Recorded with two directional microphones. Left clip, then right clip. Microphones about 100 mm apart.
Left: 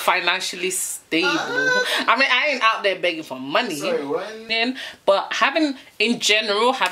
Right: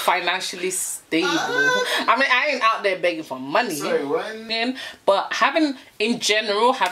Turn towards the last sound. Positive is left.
turn(degrees=10)  # may be behind; listen again after turning